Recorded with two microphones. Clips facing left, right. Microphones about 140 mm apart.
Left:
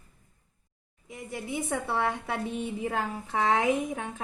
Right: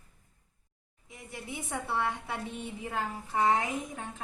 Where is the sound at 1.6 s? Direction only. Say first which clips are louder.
Left 2 dB; 70° left (ahead or behind).